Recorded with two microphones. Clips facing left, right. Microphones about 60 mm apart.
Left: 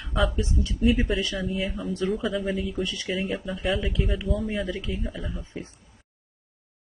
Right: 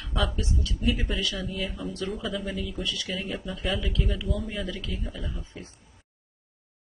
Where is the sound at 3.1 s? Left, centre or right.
Centre.